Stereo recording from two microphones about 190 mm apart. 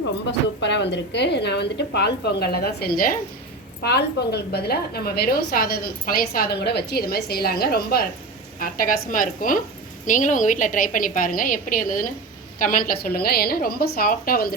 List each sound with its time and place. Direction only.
0.3 s a woman's voice: 65° left (ahead or behind); by 3.2 s 50° left (ahead or behind)
3.8 s a woman's voice: 60° left (ahead or behind)